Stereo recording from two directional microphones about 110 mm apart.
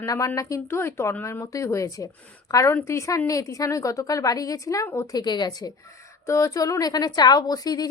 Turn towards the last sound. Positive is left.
turn(degrees=35)  # may be behind; listen again after turning